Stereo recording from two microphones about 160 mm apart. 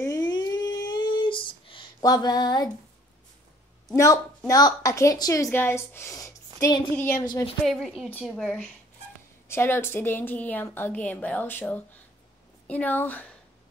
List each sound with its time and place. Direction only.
0.0 s a sound: 25° left (ahead or behind)
3.9 s a woman's voice: 20° left (ahead or behind)
7.6 s speech: centre (ahead or behind)
9.5 s a woman's voice: 15° left (ahead or behind)